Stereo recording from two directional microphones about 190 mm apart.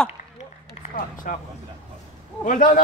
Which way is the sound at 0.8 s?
45° left (ahead or behind).